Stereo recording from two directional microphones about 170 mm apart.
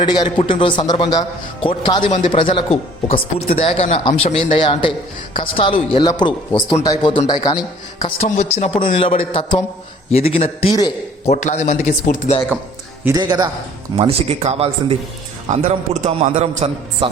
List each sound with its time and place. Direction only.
0.0 s a man's voice: 25° left (ahead or behind)
8.0 s speech: 40° left (ahead or behind)
13.1 s a man's voice: 25° right (ahead or behind)
13.9 s a man's voice: 35° right (ahead or behind)